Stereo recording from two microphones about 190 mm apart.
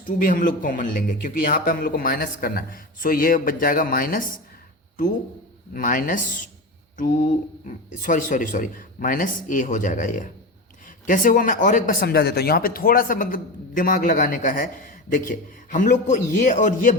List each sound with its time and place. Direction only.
0.2 s a man's voice: 45° left (ahead or behind)
5.7 s a man's voice: 45° left (ahead or behind)